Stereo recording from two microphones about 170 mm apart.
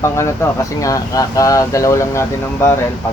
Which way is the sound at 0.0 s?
15° left (ahead or behind).